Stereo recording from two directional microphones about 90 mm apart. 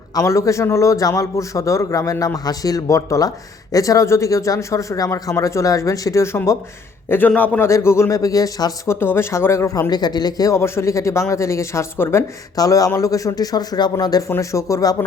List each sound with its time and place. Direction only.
0.1 s a man's voice: 35° left (ahead or behind)
7.1 s a man's voice: 20° left (ahead or behind)
7.7 s a man's voice: 30° left (ahead or behind)
8.9 s a man's voice: 25° left (ahead or behind)
9.9 s speech: 50° left (ahead or behind)
10.5 s a man's voice: 30° left (ahead or behind)
12.5 s a man's voice: 40° left (ahead or behind)